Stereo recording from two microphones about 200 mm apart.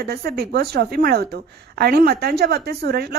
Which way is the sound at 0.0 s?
50° right (ahead or behind).